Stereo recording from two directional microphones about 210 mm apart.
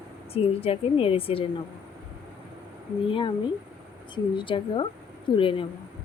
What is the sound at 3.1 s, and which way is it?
Speech, 25° left (ahead or behind).